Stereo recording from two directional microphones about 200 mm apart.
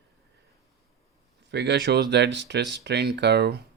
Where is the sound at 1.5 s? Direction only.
60° right (ahead or behind).